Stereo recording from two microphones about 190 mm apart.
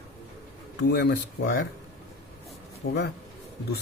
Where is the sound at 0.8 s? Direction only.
60° left (ahead or behind).